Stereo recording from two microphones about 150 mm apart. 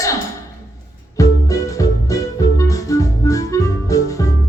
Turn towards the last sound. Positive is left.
turn(degrees=20)  # may be behind; listen again after turning